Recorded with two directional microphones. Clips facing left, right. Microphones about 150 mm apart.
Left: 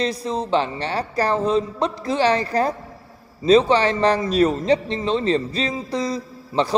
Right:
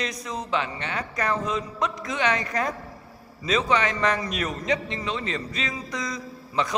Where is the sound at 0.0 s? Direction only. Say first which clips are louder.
Left 8 dB; 30° left (ahead or behind).